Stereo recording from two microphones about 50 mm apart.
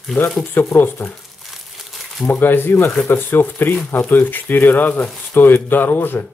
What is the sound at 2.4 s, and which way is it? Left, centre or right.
Speech, left.